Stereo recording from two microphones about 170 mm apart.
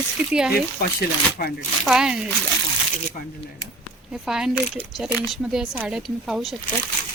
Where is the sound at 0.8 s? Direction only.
65° left (ahead or behind).